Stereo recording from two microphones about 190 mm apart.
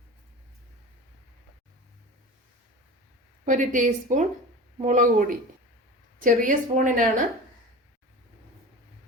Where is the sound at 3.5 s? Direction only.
40° right (ahead or behind).